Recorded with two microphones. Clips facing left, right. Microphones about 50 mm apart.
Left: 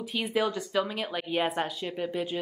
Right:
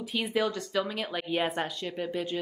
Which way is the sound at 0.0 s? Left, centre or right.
Centre.